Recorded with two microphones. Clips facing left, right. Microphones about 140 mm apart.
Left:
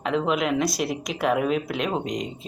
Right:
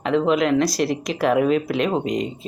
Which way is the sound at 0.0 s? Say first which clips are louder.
Right 5 dB; centre (ahead or behind).